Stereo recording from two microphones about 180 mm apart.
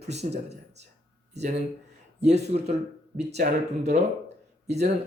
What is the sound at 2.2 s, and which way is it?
Speech, 35° right (ahead or behind).